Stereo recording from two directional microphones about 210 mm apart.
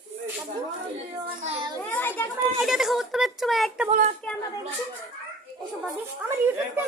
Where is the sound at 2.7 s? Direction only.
Centre (ahead or behind).